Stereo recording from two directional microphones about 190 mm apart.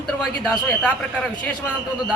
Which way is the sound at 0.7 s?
10° left (ahead or behind).